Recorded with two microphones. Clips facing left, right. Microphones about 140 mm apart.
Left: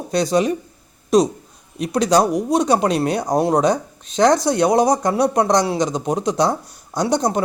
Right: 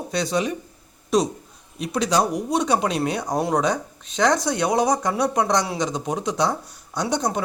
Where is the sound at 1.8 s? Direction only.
40° left (ahead or behind).